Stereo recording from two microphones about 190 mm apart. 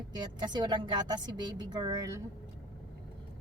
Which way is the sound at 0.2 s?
25° right (ahead or behind).